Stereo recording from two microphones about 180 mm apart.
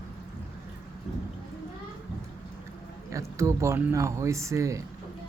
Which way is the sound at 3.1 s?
15° right (ahead or behind).